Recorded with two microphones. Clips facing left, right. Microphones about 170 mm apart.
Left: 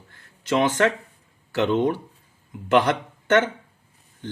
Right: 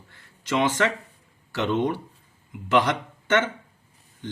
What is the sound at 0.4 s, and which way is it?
Speech, 55° left (ahead or behind).